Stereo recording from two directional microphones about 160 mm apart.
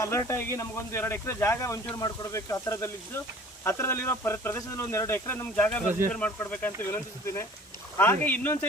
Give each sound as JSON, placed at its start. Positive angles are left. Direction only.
{"t": 0.0, "sound": "a man's voice", "side_deg": 20}